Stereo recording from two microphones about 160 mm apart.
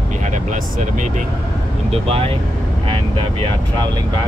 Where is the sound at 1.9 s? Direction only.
35° right (ahead or behind).